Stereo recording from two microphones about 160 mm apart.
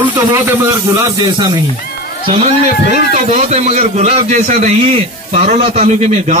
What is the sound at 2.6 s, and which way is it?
A man's voice, 45° right (ahead or behind).